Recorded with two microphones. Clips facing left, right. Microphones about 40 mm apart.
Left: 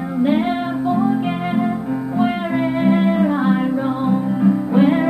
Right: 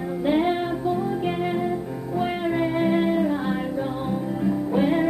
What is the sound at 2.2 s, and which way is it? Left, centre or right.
Music, centre.